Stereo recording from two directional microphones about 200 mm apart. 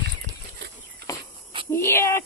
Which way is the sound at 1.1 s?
15° left (ahead or behind).